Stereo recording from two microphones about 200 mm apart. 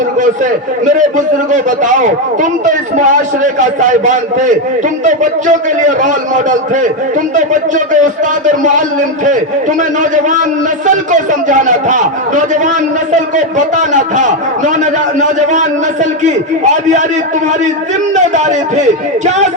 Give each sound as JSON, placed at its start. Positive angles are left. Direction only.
{"t": 0.9, "sound": "a man's voice", "side_deg": -40}
{"t": 8.6, "sound": "a man's voice", "side_deg": -40}
{"t": 10.8, "sound": "a man's voice", "side_deg": -40}
{"t": 18.1, "sound": "a man's voice", "side_deg": -35}